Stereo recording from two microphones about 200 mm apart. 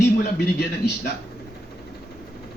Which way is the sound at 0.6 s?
55° left (ahead or behind).